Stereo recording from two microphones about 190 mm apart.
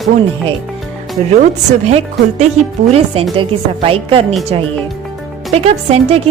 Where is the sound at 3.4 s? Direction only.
30° right (ahead or behind).